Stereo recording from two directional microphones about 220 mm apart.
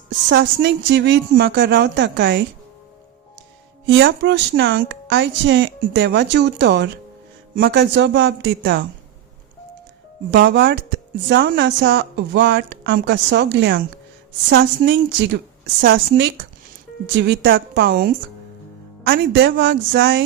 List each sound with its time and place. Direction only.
0.3 s speech: 50° right (ahead or behind)
3.8 s speech: 55° right (ahead or behind)
10.3 s speech: 50° right (ahead or behind)